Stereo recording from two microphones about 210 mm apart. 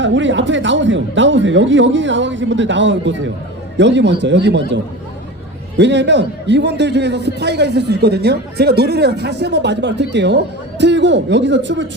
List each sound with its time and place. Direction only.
0.0 s a man's voice: 60° right (ahead or behind)
5.7 s a man's voice: 55° right (ahead or behind)